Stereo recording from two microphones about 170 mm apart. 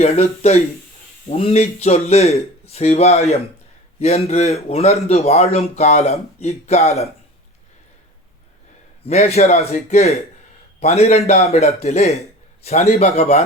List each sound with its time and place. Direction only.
0.0 s a man's voice: 40° left (ahead or behind)
9.0 s a man's voice: 40° left (ahead or behind)